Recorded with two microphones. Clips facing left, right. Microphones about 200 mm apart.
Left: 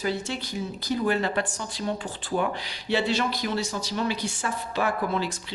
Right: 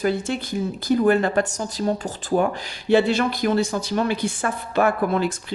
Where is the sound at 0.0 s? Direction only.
50° right (ahead or behind).